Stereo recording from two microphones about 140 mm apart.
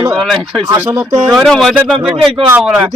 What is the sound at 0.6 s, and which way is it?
Speech, 20° right (ahead or behind).